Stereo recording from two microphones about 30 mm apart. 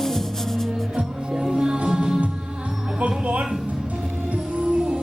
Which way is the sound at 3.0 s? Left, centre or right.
Right.